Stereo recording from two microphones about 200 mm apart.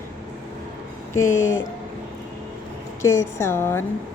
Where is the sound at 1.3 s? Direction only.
75° left (ahead or behind).